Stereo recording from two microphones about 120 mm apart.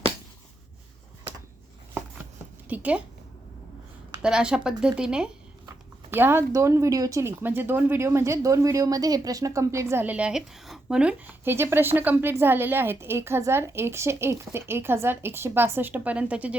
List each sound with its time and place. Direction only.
2.6 s a woman's voice: 10° right (ahead or behind)
4.2 s speech: 5° right (ahead or behind)
6.1 s speech: 20° right (ahead or behind)